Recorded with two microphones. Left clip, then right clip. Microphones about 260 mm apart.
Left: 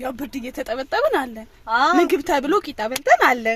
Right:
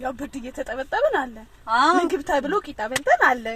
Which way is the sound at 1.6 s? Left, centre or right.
Centre.